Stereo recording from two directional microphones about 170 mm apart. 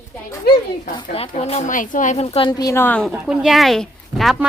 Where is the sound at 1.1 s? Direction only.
35° left (ahead or behind); by 3.1 s 10° left (ahead or behind).